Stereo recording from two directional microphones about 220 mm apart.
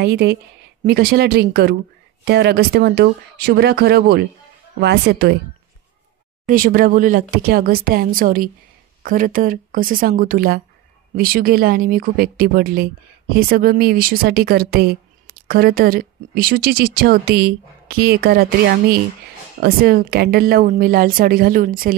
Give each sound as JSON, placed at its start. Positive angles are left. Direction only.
{"t": 0.0, "sound": "speech", "side_deg": -50}
{"t": 6.4, "sound": "speech", "side_deg": -40}